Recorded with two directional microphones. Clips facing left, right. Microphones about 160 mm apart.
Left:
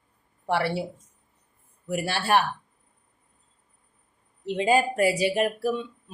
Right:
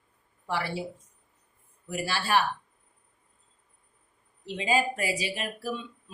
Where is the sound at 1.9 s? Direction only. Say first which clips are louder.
Left 4 dB; 60° left (ahead or behind).